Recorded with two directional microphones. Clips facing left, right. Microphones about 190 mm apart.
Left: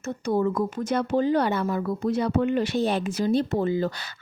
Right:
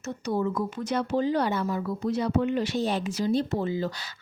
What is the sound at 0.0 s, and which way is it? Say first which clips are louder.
Speech: left 4 dB; 50° left (ahead or behind).